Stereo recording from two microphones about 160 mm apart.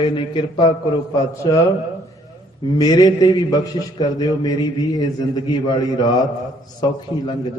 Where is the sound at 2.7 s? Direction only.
25° left (ahead or behind).